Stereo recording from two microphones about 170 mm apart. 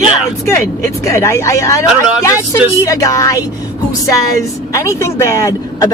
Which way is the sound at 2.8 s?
20° left (ahead or behind).